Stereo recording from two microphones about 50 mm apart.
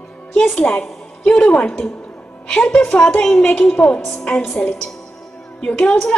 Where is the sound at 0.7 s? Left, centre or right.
Centre.